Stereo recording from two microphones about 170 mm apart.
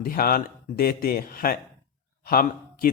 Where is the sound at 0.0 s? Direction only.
60° left (ahead or behind).